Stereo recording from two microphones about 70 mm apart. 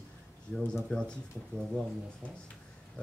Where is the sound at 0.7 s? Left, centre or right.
Centre.